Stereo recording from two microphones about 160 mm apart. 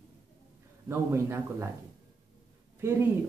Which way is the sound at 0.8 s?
15° right (ahead or behind).